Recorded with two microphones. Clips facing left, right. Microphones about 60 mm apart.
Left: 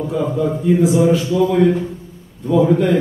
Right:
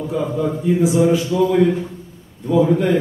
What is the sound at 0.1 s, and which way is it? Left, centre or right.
A man's voice, centre.